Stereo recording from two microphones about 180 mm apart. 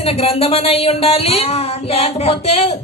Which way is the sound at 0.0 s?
35° left (ahead or behind).